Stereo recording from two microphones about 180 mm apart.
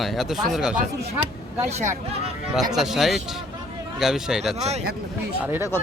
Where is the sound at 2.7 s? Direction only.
Centre (ahead or behind).